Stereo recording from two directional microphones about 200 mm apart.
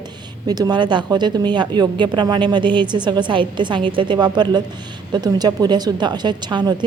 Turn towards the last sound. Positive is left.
turn(degrees=-20)  # may be behind; listen again after turning